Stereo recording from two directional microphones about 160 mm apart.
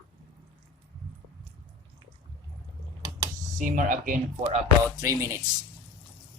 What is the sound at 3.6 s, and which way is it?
Speech, 55° right (ahead or behind).